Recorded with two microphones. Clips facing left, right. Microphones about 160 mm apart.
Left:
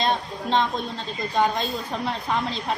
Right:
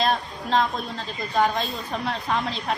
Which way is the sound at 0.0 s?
Centre (ahead or behind).